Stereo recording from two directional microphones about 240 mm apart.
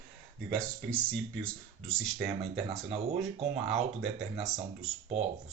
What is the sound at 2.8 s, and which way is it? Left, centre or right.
Speech, right.